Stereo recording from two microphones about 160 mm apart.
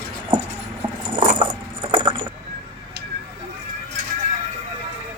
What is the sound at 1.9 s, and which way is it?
Keys jangling, 30° right (ahead or behind).